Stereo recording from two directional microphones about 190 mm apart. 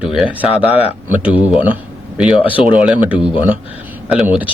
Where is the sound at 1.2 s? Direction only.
10° right (ahead or behind).